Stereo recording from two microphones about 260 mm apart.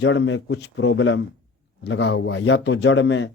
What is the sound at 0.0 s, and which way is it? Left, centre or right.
Speech, left.